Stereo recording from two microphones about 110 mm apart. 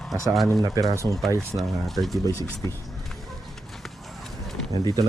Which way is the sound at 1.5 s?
Centre (ahead or behind).